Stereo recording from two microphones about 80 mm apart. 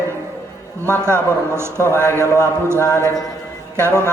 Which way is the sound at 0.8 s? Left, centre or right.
Right.